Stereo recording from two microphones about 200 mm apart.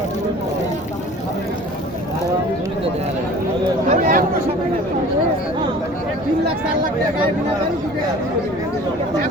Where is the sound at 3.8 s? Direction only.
45° right (ahead or behind).